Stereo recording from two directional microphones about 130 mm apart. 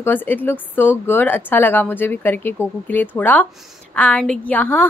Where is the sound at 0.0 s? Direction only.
15° left (ahead or behind).